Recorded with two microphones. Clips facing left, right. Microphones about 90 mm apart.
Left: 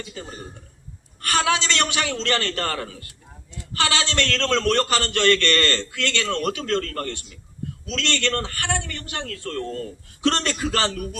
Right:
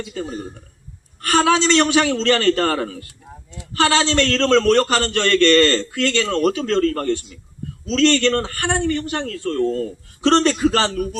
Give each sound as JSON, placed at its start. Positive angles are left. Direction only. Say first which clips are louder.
{"t": 1.3, "sound": "a man's voice", "louder": "right 6 dB", "side_deg": -40}